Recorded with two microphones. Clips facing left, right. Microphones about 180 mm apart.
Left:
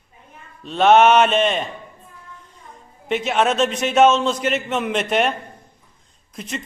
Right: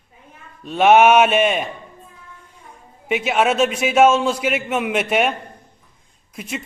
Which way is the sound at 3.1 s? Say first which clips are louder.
Right 1 dB; 5° right (ahead or behind).